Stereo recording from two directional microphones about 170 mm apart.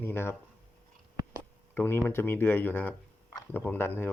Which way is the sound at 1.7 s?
15° left (ahead or behind).